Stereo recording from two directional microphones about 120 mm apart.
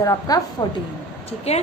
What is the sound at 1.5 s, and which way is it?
Speech, 60° left (ahead or behind).